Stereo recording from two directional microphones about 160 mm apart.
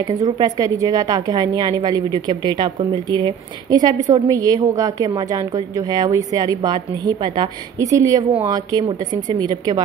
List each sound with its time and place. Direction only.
0.0 s a woman's voice: 25° right (ahead or behind)